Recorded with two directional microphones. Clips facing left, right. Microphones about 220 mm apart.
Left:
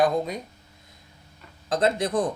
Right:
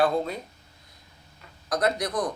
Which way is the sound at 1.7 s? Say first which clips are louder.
Left 3 dB; 25° left (ahead or behind).